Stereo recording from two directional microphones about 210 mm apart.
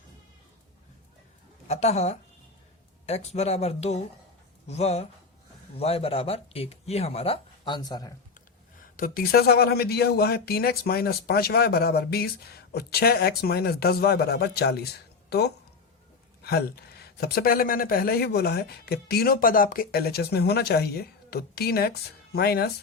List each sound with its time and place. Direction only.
1.6 s speech: 30° left (ahead or behind)
9.0 s speech: 45° left (ahead or behind)